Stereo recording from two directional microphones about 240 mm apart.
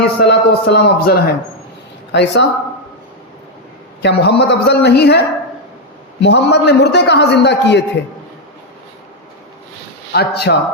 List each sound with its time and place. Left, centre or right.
0.0 s a man's voice: left
4.0 s a man's voice: left
10.1 s a man's voice: left